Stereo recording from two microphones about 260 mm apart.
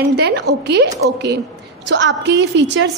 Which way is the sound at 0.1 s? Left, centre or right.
Right.